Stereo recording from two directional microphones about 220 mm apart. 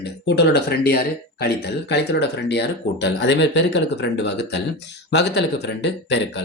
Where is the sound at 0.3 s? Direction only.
50° left (ahead or behind).